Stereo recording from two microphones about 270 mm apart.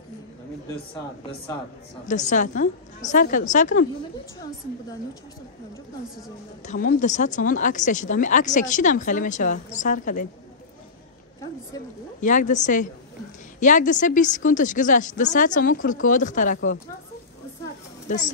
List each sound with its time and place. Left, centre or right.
2.0 s speech: left
6.6 s speech: left
12.2 s speech: left
18.0 s speech: left